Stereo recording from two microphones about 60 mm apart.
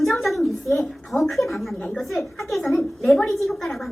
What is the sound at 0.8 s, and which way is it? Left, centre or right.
A woman's voice, centre.